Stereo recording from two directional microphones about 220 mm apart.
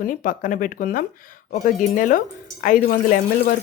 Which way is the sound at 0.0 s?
40° left (ahead or behind).